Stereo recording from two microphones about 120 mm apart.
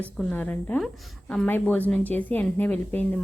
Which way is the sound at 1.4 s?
15° left (ahead or behind).